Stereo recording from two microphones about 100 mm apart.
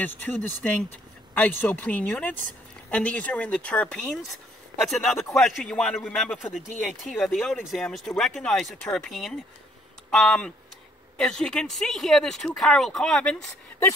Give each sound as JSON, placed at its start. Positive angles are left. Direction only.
{"t": 0.0, "sound": "speech", "side_deg": 15}